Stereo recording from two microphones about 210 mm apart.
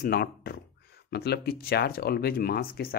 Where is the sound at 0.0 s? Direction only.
45° left (ahead or behind).